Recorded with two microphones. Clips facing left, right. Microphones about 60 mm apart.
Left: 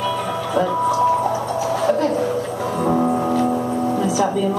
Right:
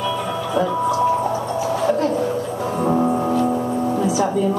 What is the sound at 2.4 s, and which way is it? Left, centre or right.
Music, left.